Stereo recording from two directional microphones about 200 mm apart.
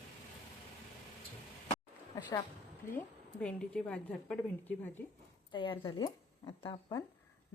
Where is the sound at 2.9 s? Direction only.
5° left (ahead or behind).